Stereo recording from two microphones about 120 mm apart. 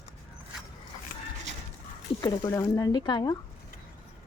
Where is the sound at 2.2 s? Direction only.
30° left (ahead or behind).